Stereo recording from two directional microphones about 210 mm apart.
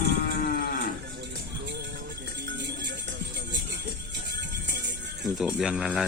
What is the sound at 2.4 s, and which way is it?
Music, 55° right (ahead or behind).